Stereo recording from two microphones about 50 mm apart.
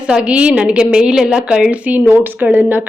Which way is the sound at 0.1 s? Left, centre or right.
Right.